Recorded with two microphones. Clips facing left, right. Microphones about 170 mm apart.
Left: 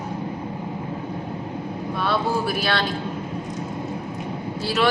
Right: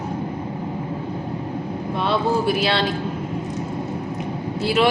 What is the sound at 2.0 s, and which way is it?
Speech, 25° right (ahead or behind).